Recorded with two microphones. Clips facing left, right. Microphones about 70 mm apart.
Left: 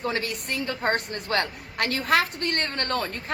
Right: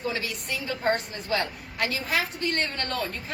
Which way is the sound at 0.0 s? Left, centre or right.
Left.